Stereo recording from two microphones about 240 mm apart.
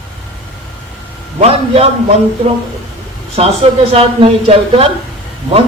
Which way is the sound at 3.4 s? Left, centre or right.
Right.